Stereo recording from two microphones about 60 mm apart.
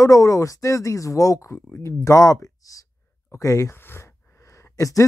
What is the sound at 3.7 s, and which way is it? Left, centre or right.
Speech, left.